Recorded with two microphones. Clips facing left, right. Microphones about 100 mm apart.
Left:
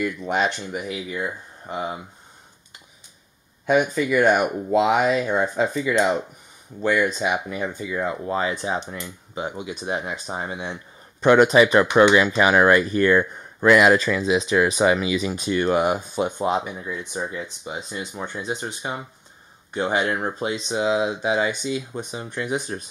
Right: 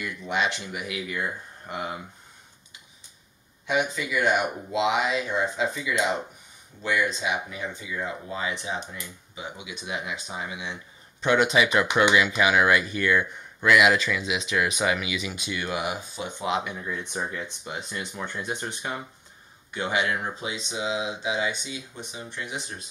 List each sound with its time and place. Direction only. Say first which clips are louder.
0.0 s speech: left 5 dB; 45° left (ahead or behind)
1.1 s speech: left 2 dB; 20° left (ahead or behind)
3.6 s speech: left 7 dB; 45° left (ahead or behind)
17.1 s speech: left 2 dB; 10° left (ahead or behind)
19.7 s speech: left 4 dB; 35° left (ahead or behind)